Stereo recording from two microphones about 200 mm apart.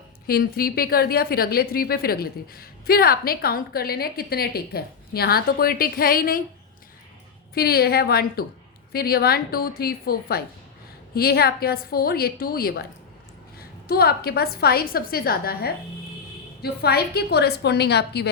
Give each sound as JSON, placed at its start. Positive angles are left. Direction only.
{"t": 0.3, "sound": "a woman's voice", "side_deg": 50}
{"t": 7.5, "sound": "a woman's voice", "side_deg": 50}